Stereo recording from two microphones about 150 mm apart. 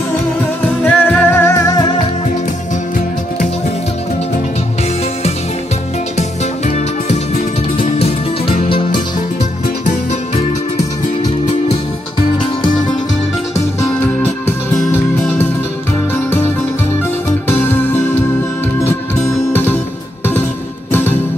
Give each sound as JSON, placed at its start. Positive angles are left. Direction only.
{"t": 0.8, "sound": "music", "side_deg": 10}
{"t": 7.7, "sound": "music", "side_deg": 40}
{"t": 14.4, "sound": "music", "side_deg": 15}
{"t": 20.9, "sound": "music", "side_deg": 15}